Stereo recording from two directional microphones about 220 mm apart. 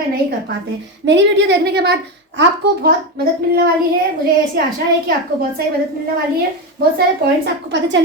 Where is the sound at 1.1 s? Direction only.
55° right (ahead or behind).